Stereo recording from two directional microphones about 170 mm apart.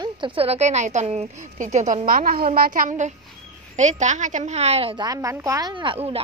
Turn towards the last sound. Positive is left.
turn(degrees=-35)  # may be behind; listen again after turning